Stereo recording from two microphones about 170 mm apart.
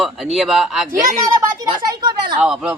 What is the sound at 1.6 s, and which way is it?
Speech, 25° right (ahead or behind).